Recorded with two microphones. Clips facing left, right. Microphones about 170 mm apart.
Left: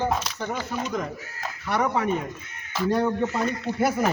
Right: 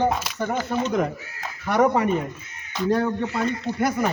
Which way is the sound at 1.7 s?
45° right (ahead or behind).